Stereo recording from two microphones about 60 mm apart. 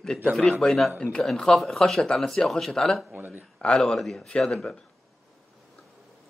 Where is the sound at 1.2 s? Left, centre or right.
Centre.